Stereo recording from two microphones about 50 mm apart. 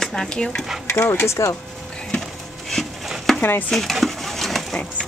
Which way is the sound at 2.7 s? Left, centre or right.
Centre.